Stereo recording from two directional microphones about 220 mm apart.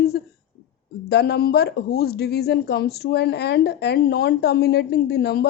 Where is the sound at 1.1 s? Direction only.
50° left (ahead or behind).